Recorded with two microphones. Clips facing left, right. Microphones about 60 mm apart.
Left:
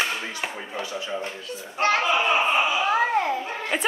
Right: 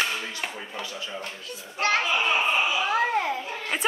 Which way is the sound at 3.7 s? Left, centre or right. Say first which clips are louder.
Left 1 dB; centre.